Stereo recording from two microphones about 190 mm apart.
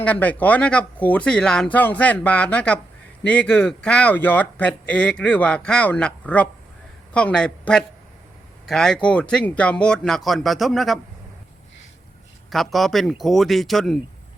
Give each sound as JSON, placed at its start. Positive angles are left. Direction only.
{"t": 0.0, "sound": "speech", "side_deg": 10}
{"t": 12.5, "sound": "speech", "side_deg": 0}